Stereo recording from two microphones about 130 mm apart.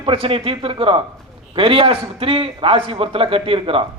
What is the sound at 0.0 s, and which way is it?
Speech, 45° right (ahead or behind).